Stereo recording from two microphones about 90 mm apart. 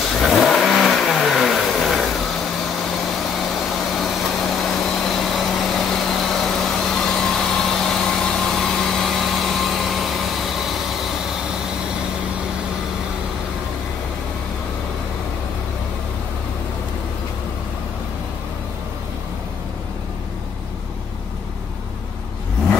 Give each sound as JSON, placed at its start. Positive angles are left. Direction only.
{"t": 0.1, "sound": "vehicle", "side_deg": 0}